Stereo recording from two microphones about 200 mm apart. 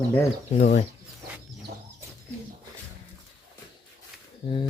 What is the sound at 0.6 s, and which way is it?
Speech, 40° left (ahead or behind).